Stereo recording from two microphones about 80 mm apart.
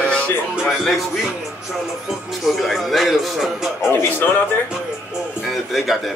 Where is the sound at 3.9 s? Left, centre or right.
Left.